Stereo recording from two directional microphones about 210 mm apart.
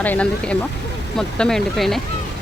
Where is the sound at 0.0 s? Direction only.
5° left (ahead or behind).